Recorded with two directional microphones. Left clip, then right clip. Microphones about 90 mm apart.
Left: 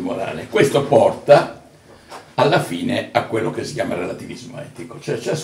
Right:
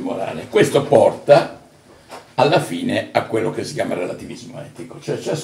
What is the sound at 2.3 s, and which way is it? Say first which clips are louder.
Speech: right 1 dB; 20° right (ahead or behind).